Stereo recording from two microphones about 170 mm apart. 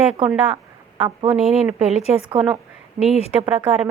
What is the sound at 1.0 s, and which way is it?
Speech, 30° right (ahead or behind).